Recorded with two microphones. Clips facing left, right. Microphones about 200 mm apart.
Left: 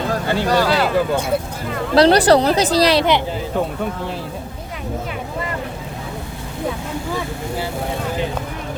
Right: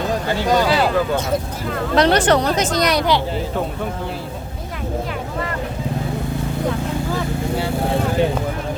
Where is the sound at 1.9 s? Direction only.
35° left (ahead or behind).